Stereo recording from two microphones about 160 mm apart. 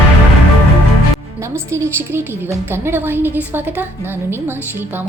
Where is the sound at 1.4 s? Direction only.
15° right (ahead or behind).